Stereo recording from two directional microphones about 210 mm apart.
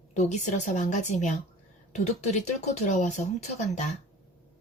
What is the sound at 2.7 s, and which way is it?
Speech, 35° left (ahead or behind).